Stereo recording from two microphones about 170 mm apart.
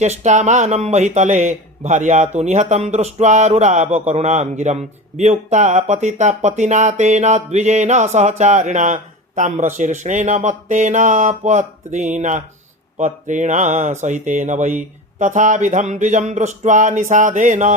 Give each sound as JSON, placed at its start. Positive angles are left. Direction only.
{"t": 0.0, "sound": "speech", "side_deg": -45}